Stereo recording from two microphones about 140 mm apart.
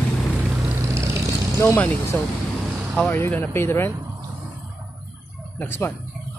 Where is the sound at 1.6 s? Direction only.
20° left (ahead or behind).